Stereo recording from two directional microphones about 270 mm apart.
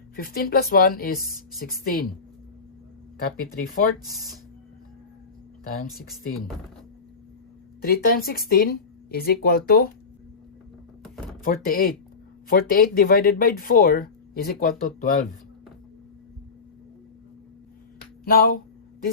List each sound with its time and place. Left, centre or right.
0.2 s speech: left
5.6 s speech: left
7.8 s speech: left
11.4 s speech: left
18.3 s speech: left